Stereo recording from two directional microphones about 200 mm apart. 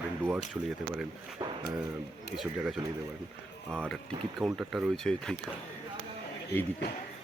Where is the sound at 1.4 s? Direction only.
20° right (ahead or behind).